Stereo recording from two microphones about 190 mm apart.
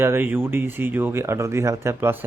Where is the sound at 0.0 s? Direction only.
10° right (ahead or behind).